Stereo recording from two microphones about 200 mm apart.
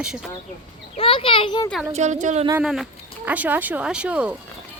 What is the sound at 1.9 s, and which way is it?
Speech, 35° right (ahead or behind).